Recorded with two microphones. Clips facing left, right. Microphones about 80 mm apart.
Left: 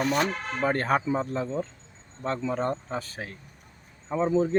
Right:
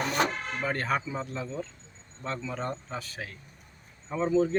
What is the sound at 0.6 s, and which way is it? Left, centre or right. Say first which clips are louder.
Speech: left 5 dB; left.